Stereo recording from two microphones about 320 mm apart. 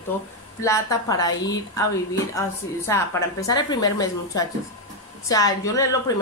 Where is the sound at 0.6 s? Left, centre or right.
Centre.